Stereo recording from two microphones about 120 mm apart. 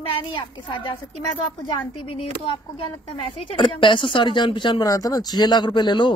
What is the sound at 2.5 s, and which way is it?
A woman's voice, 45° left (ahead or behind).